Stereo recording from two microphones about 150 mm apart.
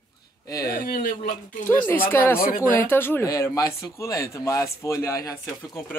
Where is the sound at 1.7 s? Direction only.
15° left (ahead or behind).